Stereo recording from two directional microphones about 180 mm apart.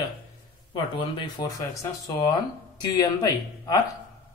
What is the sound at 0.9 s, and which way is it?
Speech, 20° left (ahead or behind).